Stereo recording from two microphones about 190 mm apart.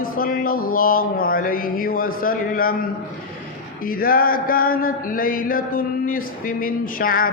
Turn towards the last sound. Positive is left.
turn(degrees=50)  # may be behind; listen again after turning